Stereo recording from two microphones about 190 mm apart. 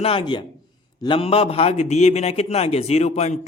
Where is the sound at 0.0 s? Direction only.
25° left (ahead or behind).